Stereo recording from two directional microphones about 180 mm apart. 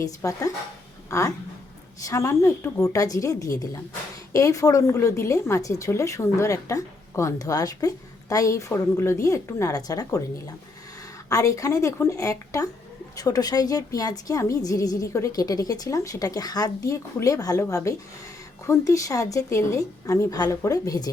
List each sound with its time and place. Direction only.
0.0 s a woman's voice: 20° left (ahead or behind)